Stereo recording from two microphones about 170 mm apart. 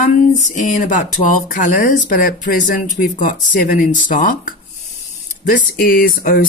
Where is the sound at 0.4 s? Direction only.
45° left (ahead or behind).